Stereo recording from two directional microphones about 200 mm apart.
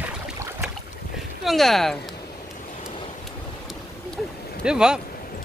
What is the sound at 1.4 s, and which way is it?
Speech, centre (ahead or behind).